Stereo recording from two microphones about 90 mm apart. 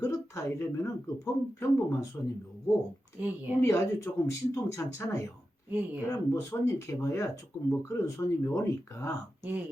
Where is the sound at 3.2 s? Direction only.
20° right (ahead or behind).